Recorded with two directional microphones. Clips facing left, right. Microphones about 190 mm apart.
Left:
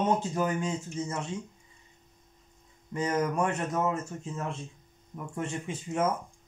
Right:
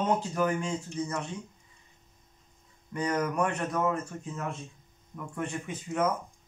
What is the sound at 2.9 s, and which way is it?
Speech, 25° left (ahead or behind).